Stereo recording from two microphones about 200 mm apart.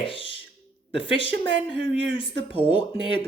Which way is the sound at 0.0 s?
25° left (ahead or behind).